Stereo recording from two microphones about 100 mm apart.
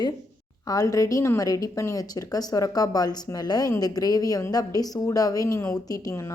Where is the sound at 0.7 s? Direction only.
35° left (ahead or behind).